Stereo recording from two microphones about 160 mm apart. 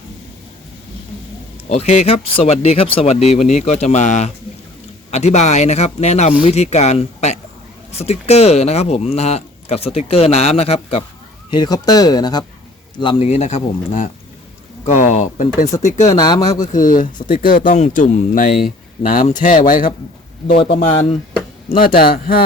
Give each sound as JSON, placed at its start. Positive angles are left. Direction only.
{"t": 1.7, "sound": "speech", "side_deg": 45}
{"t": 11.5, "sound": "speech", "side_deg": 25}
{"t": 16.0, "sound": "speech", "side_deg": 25}
{"t": 16.6, "sound": "speech", "side_deg": 55}
{"t": 20.5, "sound": "speech", "side_deg": 35}
{"t": 21.7, "sound": "speech", "side_deg": 65}